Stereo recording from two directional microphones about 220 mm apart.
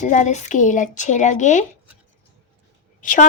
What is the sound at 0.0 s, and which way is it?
A woman's voice, 35° left (ahead or behind).